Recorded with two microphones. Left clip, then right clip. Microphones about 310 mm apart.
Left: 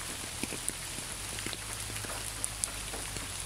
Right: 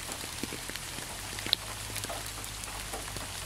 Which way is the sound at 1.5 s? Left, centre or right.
Right.